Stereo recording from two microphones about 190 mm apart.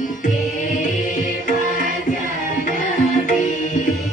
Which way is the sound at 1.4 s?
45° left (ahead or behind).